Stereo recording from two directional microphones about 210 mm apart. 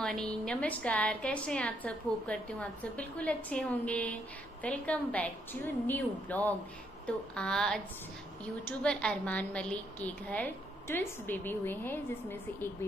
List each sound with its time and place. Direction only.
0.0 s a woman's voice: centre (ahead or behind)